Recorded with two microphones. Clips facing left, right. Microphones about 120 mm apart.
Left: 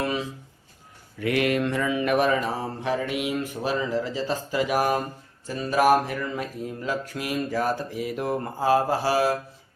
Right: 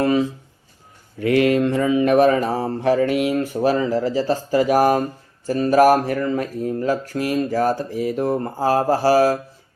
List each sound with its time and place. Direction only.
1.2 s mantra: 30° right (ahead or behind)